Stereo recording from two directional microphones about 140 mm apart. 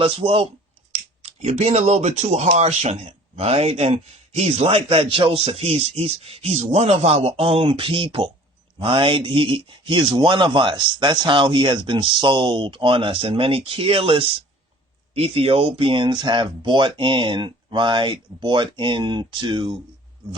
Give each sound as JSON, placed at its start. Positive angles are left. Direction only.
{"t": 0.0, "sound": "a man's voice", "side_deg": -40}
{"t": 1.2, "sound": "a man's voice", "side_deg": -55}